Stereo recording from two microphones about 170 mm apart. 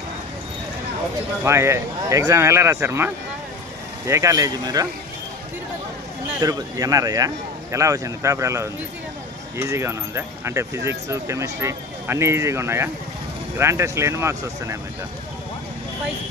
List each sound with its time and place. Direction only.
1.4 s speech: 15° right (ahead or behind)
6.4 s speech: 20° right (ahead or behind)